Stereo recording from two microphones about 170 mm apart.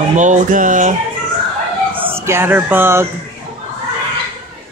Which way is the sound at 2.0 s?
15° right (ahead or behind).